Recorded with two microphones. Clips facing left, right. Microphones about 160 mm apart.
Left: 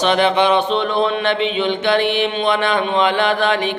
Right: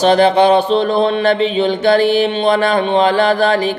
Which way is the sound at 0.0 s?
35° right (ahead or behind).